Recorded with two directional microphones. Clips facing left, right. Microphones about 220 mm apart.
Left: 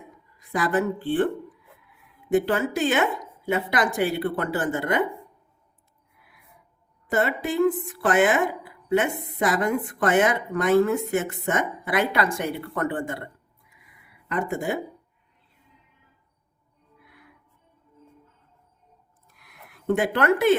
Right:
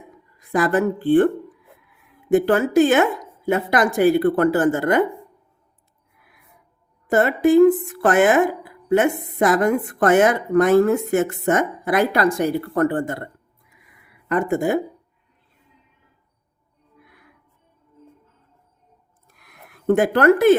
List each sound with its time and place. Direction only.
0.5 s speech: 50° right (ahead or behind)
2.3 s speech: 50° right (ahead or behind)
7.1 s speech: 45° right (ahead or behind)
14.3 s speech: 50° right (ahead or behind)
19.4 s a sound: 45° right (ahead or behind)